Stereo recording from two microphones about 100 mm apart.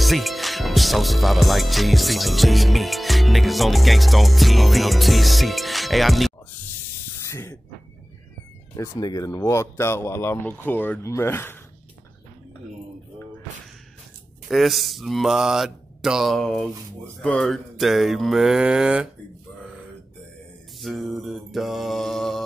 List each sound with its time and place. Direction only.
0.0 s music: centre (ahead or behind)
7.2 s spray: 30° left (ahead or behind)
8.7 s speech: 30° left (ahead or behind)
14.5 s music: centre (ahead or behind)
20.8 s music: centre (ahead or behind)